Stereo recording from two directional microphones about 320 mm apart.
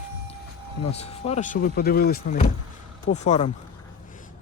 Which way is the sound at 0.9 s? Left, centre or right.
Centre.